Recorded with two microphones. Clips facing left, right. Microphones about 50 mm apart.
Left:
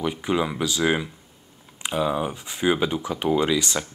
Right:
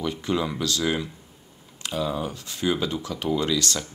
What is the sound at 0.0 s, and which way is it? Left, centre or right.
Speech, centre.